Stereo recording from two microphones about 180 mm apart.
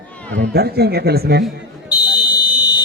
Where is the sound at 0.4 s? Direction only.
60° right (ahead or behind).